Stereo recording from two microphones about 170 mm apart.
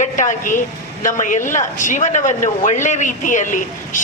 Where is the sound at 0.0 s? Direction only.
45° left (ahead or behind).